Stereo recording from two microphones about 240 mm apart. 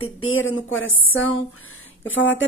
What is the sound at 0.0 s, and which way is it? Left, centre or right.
A woman's voice, left.